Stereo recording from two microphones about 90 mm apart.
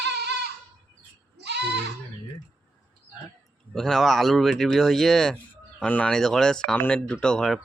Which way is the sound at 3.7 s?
5° left (ahead or behind).